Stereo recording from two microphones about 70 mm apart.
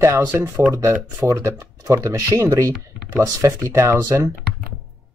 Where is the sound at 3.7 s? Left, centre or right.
Right.